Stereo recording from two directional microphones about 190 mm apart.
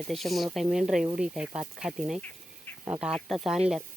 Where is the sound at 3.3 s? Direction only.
Centre (ahead or behind).